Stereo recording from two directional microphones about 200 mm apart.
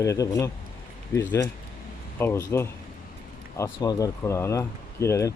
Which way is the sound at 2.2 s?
10° left (ahead or behind).